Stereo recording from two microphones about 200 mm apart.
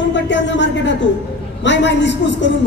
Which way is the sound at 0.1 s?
65° left (ahead or behind).